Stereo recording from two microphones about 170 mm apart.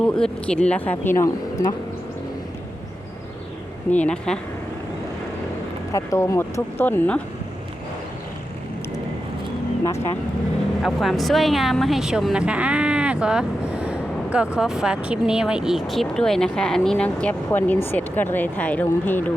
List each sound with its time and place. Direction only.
0.0 s speech: 5° left (ahead or behind)
3.9 s speech: 5° left (ahead or behind)
5.9 s speech: 20° left (ahead or behind)
9.8 s speech: 15° left (ahead or behind)
10.8 s speech: centre (ahead or behind)